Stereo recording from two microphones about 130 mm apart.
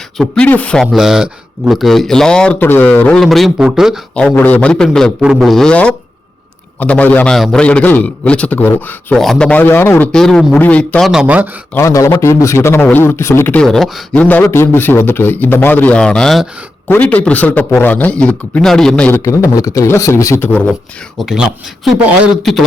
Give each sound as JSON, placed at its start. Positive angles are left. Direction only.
{"t": 0.2, "sound": "a man's voice", "side_deg": 10}
{"t": 0.9, "sound": "speech", "side_deg": -5}
{"t": 3.2, "sound": "speech", "side_deg": 0}
{"t": 4.1, "sound": "a man's voice", "side_deg": 10}
{"t": 10.1, "sound": "speech", "side_deg": 5}
{"t": 11.1, "sound": "speech", "side_deg": -5}
{"t": 11.7, "sound": "a man's voice", "side_deg": 20}
{"t": 13.6, "sound": "speech", "side_deg": 5}
{"t": 14.2, "sound": "a man's voice", "side_deg": 15}
{"t": 19.5, "sound": "a man's voice", "side_deg": 25}
{"t": 21.2, "sound": "speech", "side_deg": -5}